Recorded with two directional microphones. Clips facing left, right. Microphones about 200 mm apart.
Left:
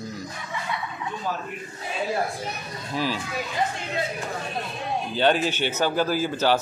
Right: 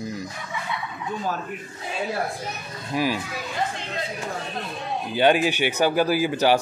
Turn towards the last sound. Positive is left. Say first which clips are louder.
# right 2 dB
turn(degrees=-15)  # may be behind; listen again after turning